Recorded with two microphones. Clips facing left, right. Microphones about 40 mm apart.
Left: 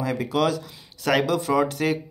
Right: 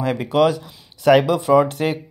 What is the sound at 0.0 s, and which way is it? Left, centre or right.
Speech, right.